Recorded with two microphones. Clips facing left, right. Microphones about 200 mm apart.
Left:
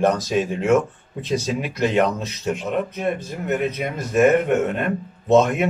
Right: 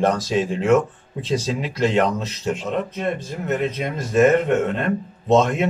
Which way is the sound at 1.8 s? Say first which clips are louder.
Even; 10° left (ahead or behind).